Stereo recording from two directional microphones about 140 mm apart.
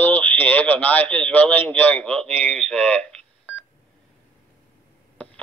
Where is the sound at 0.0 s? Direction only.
15° left (ahead or behind).